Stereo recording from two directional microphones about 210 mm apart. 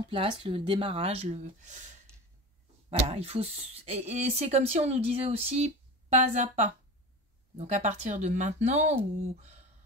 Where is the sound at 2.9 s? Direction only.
30° right (ahead or behind).